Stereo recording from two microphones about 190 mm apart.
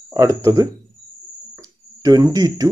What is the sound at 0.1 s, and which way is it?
Speech, 15° right (ahead or behind).